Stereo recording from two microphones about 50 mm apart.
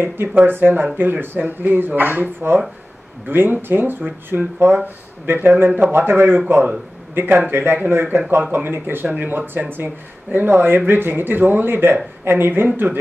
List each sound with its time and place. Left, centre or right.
0.0 s speech: right